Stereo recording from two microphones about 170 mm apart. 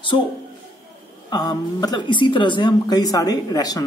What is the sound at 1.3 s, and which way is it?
Speech, 25° left (ahead or behind).